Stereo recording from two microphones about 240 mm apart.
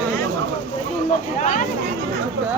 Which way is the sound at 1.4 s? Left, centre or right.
Left.